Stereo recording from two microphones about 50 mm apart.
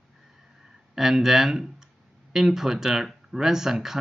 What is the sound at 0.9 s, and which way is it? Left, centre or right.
Speech, centre.